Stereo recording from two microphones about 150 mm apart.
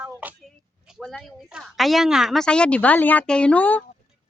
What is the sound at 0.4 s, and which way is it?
A woman's voice, centre (ahead or behind).